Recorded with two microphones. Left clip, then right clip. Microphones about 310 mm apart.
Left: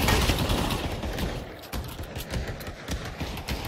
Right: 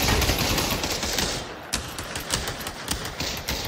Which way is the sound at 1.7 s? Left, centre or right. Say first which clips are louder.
Right 8 dB; right.